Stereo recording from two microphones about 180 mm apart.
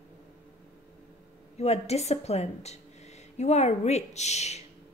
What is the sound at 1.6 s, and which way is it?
A woman's voice, 35° left (ahead or behind).